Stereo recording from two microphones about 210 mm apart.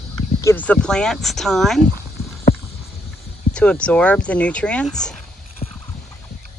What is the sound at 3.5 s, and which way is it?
Speech, 5° left (ahead or behind).